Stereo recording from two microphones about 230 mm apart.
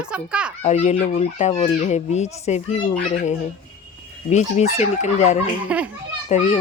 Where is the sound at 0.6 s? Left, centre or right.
Left.